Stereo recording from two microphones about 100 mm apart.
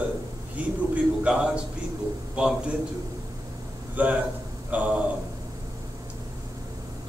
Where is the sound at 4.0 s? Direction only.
15° right (ahead or behind).